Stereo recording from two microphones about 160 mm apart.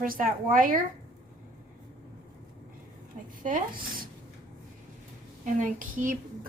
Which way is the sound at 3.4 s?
60° right (ahead or behind).